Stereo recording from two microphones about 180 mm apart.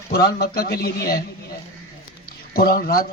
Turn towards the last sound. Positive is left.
turn(degrees=55)  # may be behind; listen again after turning